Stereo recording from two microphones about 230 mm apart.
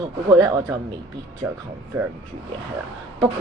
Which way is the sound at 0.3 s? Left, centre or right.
Centre.